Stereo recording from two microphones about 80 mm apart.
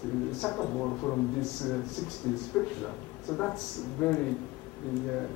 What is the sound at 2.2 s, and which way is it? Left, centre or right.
Speech, centre.